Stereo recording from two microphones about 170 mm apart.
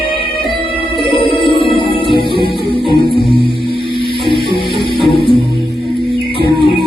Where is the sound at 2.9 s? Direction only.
30° left (ahead or behind).